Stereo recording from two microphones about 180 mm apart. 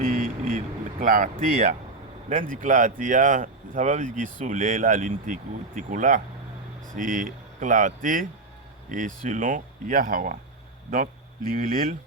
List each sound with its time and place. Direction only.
0.0 s speech: 50° right (ahead or behind)
11.5 s speech: 50° right (ahead or behind)